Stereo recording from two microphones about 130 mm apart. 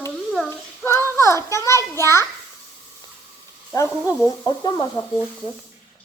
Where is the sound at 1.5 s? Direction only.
20° left (ahead or behind).